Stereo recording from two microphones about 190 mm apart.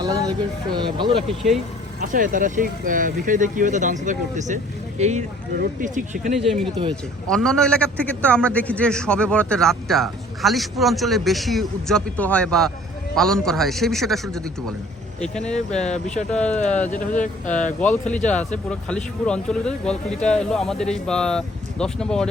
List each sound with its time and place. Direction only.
0.0 s speech: 20° right (ahead or behind)
1.3 s a man's voice: centre (ahead or behind)
2.0 s speech: 45° right (ahead or behind)
6.3 s a man's voice: centre (ahead or behind)
16.3 s speech: 5° left (ahead or behind)
16.9 s speech: 40° left (ahead or behind)
18.3 s a man's voice: 5° left (ahead or behind)